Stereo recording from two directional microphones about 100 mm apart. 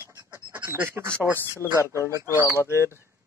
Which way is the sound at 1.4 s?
25° left (ahead or behind).